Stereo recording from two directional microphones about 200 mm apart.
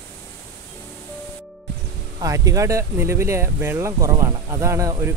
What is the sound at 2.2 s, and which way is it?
Speech, 15° right (ahead or behind).